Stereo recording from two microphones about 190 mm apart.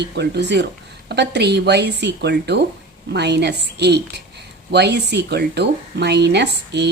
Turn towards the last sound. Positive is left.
turn(degrees=-60)  # may be behind; listen again after turning